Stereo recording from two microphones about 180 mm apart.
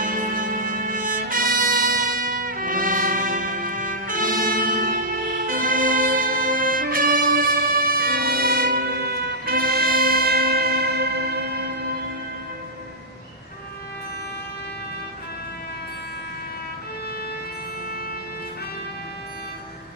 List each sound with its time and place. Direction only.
0.0 s music: 50° right (ahead or behind)